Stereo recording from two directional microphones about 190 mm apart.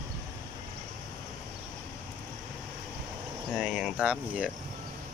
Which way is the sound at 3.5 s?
5° right (ahead or behind).